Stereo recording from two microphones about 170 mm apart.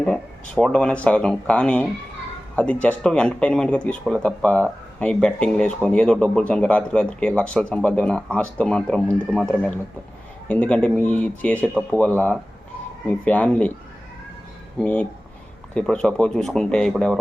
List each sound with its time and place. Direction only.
0.0 s speech: 5° left (ahead or behind)
14.8 s speech: 10° left (ahead or behind)